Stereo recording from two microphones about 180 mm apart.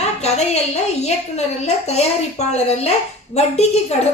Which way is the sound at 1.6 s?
35° left (ahead or behind).